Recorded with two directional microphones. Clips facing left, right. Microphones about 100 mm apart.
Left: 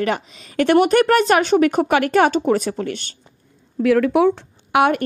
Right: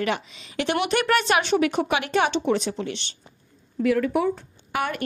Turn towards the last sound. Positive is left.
turn(degrees=60)  # may be behind; listen again after turning